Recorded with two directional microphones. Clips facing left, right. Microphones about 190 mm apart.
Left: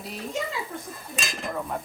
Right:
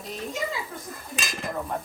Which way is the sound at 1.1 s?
Centre (ahead or behind).